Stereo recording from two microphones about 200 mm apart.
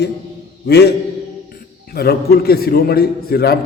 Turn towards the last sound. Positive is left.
turn(degrees=50)  # may be behind; listen again after turning